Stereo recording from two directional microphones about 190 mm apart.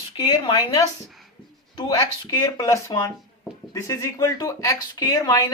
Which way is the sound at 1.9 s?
20° left (ahead or behind).